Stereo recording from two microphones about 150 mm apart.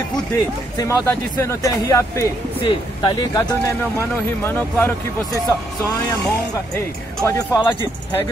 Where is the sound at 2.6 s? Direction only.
30° left (ahead or behind).